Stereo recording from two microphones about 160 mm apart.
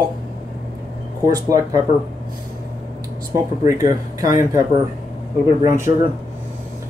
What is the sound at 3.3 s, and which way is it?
Speech, 20° right (ahead or behind).